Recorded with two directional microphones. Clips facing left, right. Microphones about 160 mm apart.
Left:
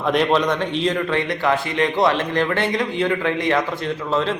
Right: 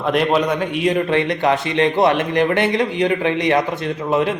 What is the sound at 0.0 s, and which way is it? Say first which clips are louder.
A man's voice: right 1 dB; centre (ahead or behind).